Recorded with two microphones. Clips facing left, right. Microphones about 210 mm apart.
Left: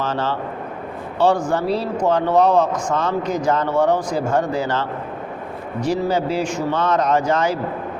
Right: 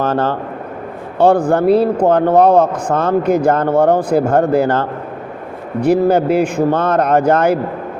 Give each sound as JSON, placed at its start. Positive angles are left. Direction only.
{"t": 0.0, "sound": "a man's voice", "side_deg": -55}